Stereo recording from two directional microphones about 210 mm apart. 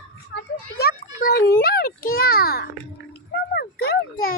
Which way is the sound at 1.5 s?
45° left (ahead or behind).